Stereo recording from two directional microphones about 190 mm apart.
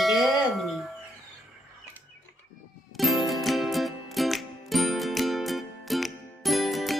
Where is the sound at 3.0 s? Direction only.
Centre (ahead or behind).